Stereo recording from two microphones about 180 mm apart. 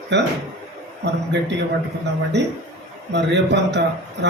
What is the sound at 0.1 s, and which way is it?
Speech, 75° right (ahead or behind).